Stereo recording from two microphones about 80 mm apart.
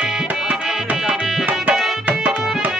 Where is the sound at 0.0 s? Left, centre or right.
Centre.